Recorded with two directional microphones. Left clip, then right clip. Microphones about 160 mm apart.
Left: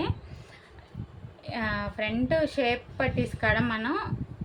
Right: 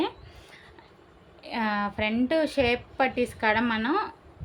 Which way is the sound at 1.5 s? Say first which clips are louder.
Right 3 dB; 55° right (ahead or behind).